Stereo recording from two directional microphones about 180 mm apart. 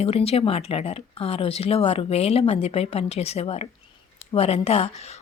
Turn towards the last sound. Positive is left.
turn(degrees=35)  # may be behind; listen again after turning